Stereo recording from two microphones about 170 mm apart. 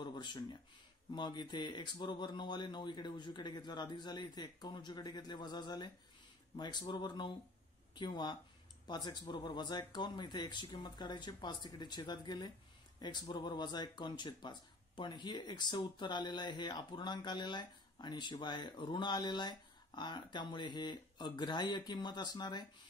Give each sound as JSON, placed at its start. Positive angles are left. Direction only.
{"t": 0.0, "sound": "speech", "side_deg": 25}